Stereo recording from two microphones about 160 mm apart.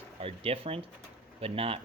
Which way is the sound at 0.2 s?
35° right (ahead or behind).